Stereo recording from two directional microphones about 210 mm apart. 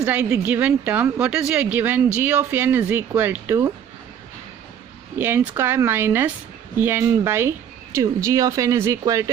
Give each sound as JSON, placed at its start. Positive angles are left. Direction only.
{"t": 0.0, "sound": "a woman's voice", "side_deg": -10}
{"t": 5.1, "sound": "a woman's voice", "side_deg": -10}